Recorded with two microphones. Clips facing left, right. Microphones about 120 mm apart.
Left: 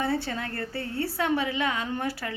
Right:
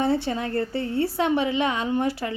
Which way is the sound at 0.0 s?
20° right (ahead or behind).